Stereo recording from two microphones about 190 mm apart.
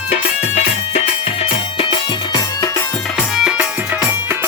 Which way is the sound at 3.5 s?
10° right (ahead or behind).